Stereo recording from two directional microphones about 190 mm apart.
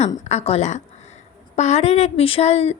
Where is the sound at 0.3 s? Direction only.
35° left (ahead or behind).